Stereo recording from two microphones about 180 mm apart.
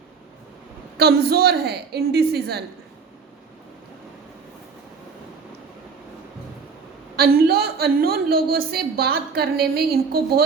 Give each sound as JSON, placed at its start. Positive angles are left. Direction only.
{"t": 0.9, "sound": "a woman's voice", "side_deg": -60}
{"t": 7.2, "sound": "a woman's voice", "side_deg": -55}